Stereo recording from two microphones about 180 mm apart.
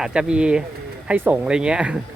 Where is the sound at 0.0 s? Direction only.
5° right (ahead or behind).